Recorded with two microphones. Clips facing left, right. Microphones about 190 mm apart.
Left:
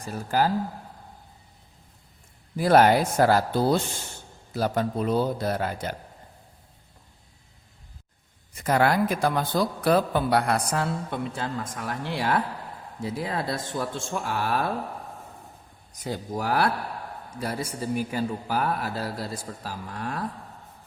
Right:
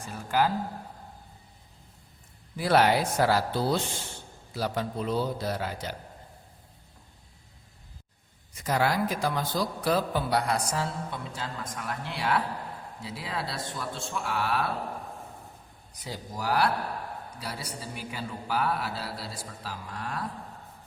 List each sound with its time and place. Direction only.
0.0 s speech: 40° left (ahead or behind)
2.6 s a man's voice: 45° left (ahead or behind)
8.6 s a man's voice: 55° left (ahead or behind)
16.0 s a man's voice: 55° left (ahead or behind)